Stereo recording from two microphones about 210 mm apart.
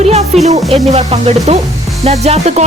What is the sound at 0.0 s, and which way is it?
Music, 30° right (ahead or behind).